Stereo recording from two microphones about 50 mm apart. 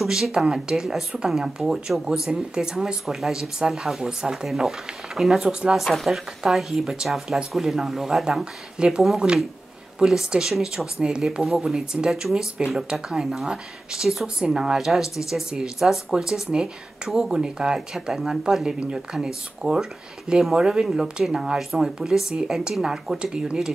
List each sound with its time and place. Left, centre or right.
0.0 s speech: centre
5.5 s speech: centre
5.8 s speech: centre